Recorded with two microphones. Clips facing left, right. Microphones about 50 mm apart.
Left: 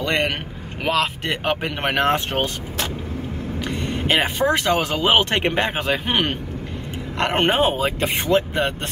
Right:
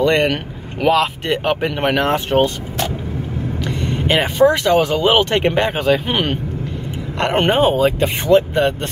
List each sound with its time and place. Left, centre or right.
0.0 s speech: centre
4.1 s speech: centre
5.5 s speech: centre
7.2 s speech: centre